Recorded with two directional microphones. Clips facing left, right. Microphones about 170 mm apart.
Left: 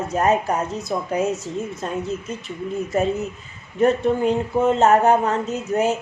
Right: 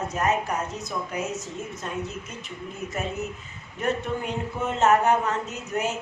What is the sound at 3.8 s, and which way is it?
A woman's voice, 35° left (ahead or behind).